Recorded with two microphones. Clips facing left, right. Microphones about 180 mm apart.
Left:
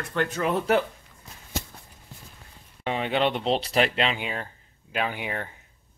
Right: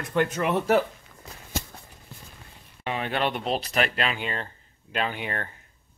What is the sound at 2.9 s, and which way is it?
Speech, 20° left (ahead or behind).